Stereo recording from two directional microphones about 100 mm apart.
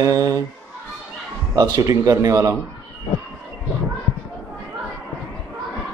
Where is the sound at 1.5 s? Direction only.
35° right (ahead or behind).